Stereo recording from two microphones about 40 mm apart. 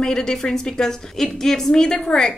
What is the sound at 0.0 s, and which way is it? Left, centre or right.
A woman's voice, centre.